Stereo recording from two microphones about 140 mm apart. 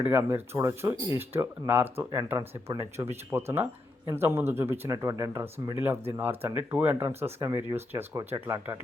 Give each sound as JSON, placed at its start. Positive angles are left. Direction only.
{"t": 0.0, "sound": "speech", "side_deg": -15}